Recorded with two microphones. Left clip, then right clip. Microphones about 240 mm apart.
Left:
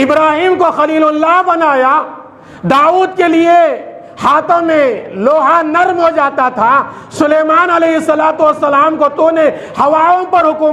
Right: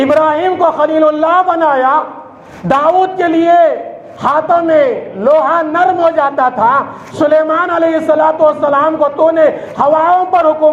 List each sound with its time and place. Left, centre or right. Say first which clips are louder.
0.0 s a man's voice: left 1 dB; left